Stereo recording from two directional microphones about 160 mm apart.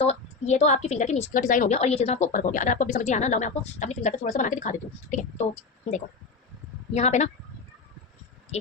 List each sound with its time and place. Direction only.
0.0 s a woman's voice: 45° left (ahead or behind)
6.9 s a woman's voice: 45° left (ahead or behind)